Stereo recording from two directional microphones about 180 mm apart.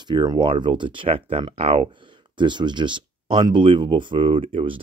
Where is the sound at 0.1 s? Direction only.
25° right (ahead or behind).